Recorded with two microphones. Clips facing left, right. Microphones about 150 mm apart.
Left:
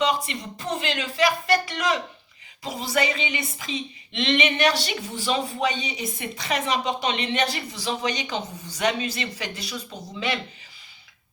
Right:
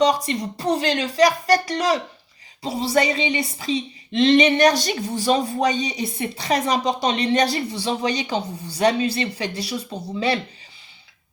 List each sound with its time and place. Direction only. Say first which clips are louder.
0.0 s speech: right 5 dB; 40° right (ahead or behind)